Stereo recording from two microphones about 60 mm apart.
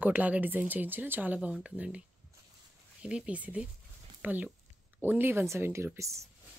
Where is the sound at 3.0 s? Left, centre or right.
Centre.